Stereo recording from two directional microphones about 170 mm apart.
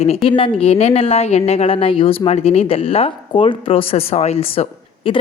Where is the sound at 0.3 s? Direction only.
30° left (ahead or behind).